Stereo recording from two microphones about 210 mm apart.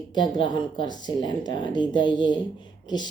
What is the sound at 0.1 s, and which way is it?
Speech, 20° left (ahead or behind).